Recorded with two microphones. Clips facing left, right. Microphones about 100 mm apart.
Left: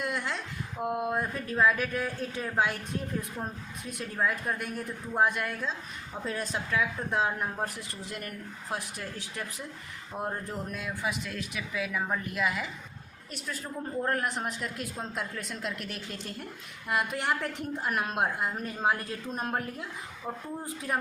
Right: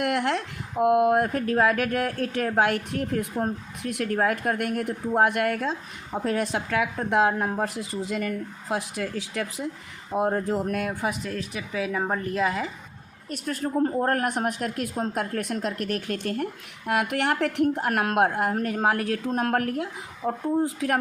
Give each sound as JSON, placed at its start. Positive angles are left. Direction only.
{"t": 0.0, "sound": "speech", "side_deg": -65}
{"t": 10.8, "sound": "a woman's voice", "side_deg": -45}
{"t": 13.3, "sound": "speech", "side_deg": -55}
{"t": 15.6, "sound": "speech", "side_deg": -45}